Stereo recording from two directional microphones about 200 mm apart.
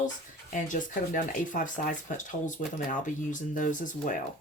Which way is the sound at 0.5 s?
40° left (ahead or behind).